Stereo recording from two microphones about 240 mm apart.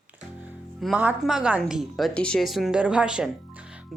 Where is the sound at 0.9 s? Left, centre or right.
Centre.